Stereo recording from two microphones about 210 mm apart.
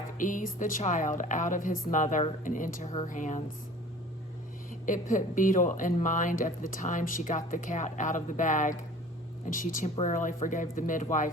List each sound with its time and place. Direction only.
0.2 s speech: 40° left (ahead or behind)
4.7 s speech: 40° left (ahead or behind)